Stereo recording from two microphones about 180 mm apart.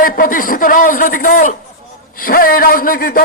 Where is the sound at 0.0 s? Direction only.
50° left (ahead or behind).